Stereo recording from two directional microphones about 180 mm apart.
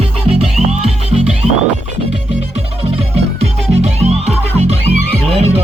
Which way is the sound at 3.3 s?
35° right (ahead or behind).